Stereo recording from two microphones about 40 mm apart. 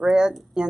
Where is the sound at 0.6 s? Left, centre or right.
Right.